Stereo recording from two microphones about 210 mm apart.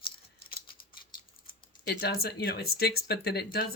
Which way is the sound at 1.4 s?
50° left (ahead or behind).